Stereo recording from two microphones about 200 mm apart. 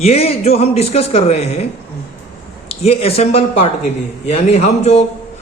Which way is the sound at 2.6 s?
30° left (ahead or behind).